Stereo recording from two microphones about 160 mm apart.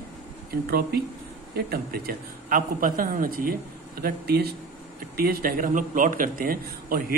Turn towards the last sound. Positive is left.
turn(degrees=-60)  # may be behind; listen again after turning